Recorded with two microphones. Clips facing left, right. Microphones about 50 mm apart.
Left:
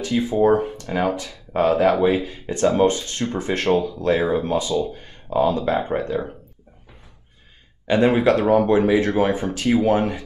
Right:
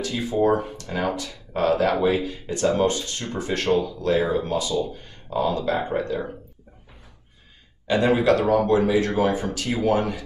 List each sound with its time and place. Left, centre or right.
0.6 s speech: left
7.8 s speech: left